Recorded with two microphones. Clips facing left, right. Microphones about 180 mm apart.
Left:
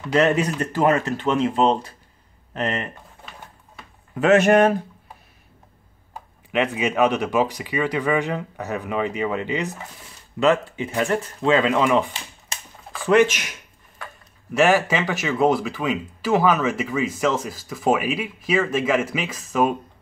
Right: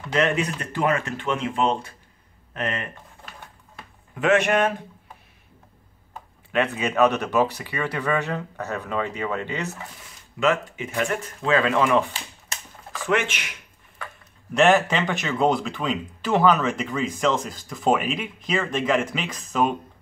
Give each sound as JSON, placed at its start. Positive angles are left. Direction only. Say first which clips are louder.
{"t": 0.1, "sound": "speech", "louder": "left 4 dB", "side_deg": 40}
{"t": 4.2, "sound": "speech", "louder": "left 5 dB", "side_deg": 40}
{"t": 6.5, "sound": "speech", "louder": "left 2 dB", "side_deg": 15}
{"t": 10.4, "sound": "speech", "louder": "left 4 dB", "side_deg": 30}
{"t": 13.0, "sound": "speech", "louder": "left 7 dB", "side_deg": 35}
{"t": 14.5, "sound": "speech", "louder": "even", "side_deg": 5}